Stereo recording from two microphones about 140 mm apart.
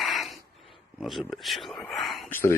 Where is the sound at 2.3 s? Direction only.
20° left (ahead or behind).